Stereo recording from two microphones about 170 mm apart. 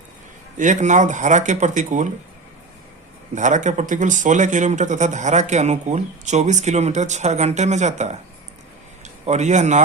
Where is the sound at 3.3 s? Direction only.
45° right (ahead or behind).